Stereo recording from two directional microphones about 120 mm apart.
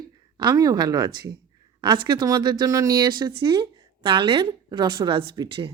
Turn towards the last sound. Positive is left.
turn(degrees=-45)  # may be behind; listen again after turning